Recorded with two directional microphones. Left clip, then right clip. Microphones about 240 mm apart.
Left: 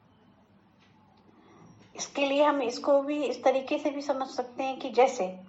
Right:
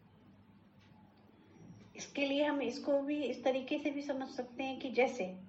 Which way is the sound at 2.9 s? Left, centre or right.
Left.